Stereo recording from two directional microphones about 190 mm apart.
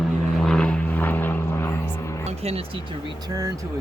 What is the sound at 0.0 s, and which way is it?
Vehicle, centre (ahead or behind).